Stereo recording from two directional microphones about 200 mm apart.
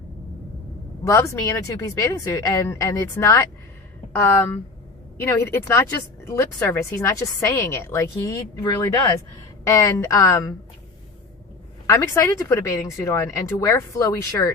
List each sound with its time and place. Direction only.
1.0 s speech: 15° left (ahead or behind)
11.9 s speech: 15° left (ahead or behind)